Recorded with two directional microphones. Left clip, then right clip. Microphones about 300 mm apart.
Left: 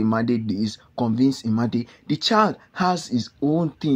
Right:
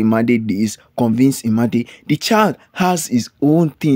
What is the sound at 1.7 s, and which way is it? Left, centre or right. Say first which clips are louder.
Speech: right 7 dB; right.